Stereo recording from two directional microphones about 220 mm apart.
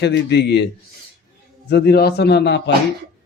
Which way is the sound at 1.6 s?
50° left (ahead or behind).